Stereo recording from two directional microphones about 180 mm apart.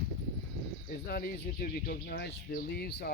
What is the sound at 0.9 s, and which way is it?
Speech, 55° left (ahead or behind).